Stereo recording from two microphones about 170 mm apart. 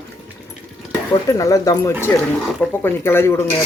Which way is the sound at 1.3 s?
20° left (ahead or behind).